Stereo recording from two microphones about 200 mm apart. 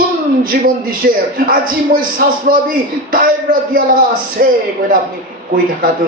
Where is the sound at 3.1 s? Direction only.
45° right (ahead or behind).